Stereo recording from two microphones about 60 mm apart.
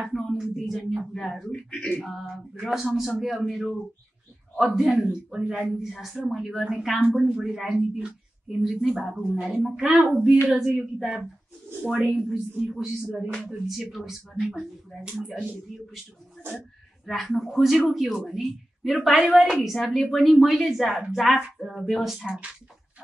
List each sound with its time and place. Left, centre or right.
0.0 s a sound: centre
0.4 s a woman's voice: centre
1.7 s a sound: centre
2.0 s a woman's voice: centre
4.9 s speech: right
5.5 s a woman's voice: centre
16.5 s a woman's voice: centre